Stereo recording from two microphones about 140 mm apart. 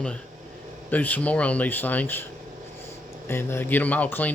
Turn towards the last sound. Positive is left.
turn(degrees=15)  # may be behind; listen again after turning